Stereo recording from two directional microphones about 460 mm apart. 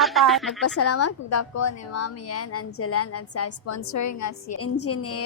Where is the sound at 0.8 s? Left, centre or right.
Left.